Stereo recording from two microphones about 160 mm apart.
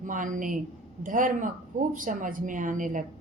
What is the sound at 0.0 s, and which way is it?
A woman's voice, 55° right (ahead or behind).